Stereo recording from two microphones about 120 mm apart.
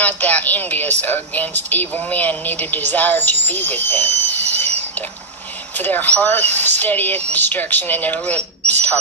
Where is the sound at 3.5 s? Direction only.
15° left (ahead or behind).